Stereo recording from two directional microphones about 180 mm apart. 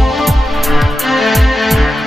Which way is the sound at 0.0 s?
Centre (ahead or behind).